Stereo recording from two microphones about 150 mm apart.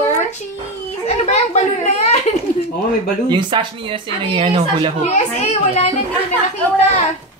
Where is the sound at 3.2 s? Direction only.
30° right (ahead or behind).